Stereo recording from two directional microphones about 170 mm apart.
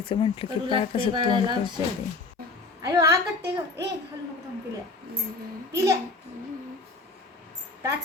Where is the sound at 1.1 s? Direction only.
30° right (ahead or behind).